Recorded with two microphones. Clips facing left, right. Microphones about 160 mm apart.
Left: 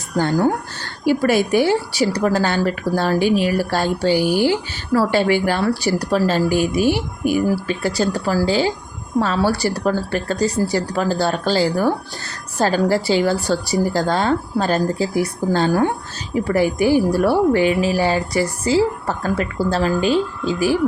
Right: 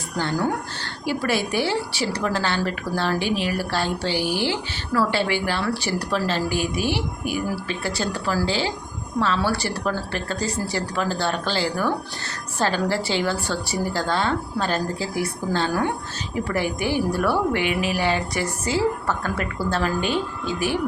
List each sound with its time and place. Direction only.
0.2 s a woman's voice: 45° left (ahead or behind)